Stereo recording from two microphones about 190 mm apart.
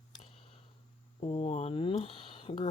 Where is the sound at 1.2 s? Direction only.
30° left (ahead or behind).